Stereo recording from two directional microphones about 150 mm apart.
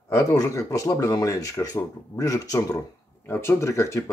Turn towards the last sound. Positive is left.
turn(degrees=20)  # may be behind; listen again after turning